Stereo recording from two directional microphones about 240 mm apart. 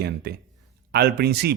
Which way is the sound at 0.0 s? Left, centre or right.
Right.